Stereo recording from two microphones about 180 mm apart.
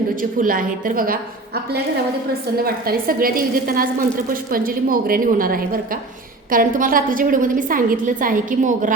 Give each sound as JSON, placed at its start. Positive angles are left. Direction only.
{"t": 0.2, "sound": "a woman's voice", "side_deg": -50}
{"t": 2.6, "sound": "a woman's voice", "side_deg": -55}